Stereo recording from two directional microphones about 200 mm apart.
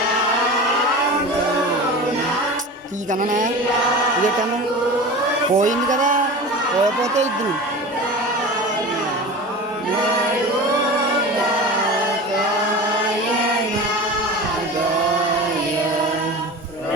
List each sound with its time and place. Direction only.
3.1 s speech: 40° right (ahead or behind)
5.5 s speech: 40° right (ahead or behind)